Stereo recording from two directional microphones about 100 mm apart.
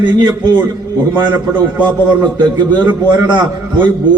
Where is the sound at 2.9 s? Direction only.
50° right (ahead or behind).